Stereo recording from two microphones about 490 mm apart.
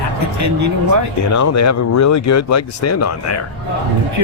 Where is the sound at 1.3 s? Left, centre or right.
Left.